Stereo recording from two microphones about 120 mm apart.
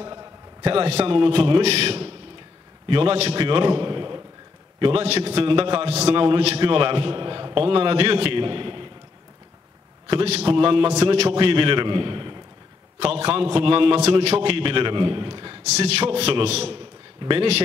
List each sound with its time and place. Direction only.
0.0 s a sound: 35° right (ahead or behind)
0.6 s a man's voice: 50° right (ahead or behind)
10.0 s a man's voice: 50° right (ahead or behind)
13.0 s a man's voice: 55° right (ahead or behind)
15.7 s a man's voice: 60° right (ahead or behind)
17.2 s a man's voice: 45° right (ahead or behind)